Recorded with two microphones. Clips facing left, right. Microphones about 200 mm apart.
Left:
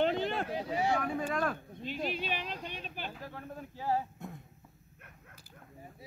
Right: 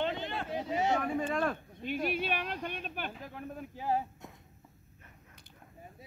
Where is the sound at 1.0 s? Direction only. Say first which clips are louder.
Right 1 dB; centre (ahead or behind).